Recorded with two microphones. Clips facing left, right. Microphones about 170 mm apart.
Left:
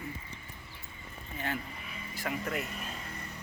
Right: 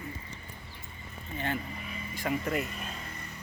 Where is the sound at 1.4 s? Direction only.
5° left (ahead or behind).